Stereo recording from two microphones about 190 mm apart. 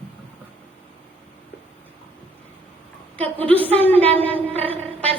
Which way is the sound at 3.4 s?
10° left (ahead or behind).